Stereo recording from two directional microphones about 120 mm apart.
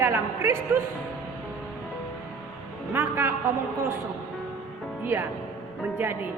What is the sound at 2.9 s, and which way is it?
Speech, 20° right (ahead or behind).